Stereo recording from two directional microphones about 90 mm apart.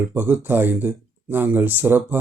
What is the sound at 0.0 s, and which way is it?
Speech, 25° right (ahead or behind).